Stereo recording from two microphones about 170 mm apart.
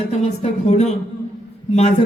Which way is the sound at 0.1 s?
40° left (ahead or behind).